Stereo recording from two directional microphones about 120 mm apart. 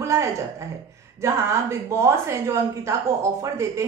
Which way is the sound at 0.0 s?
25° right (ahead or behind).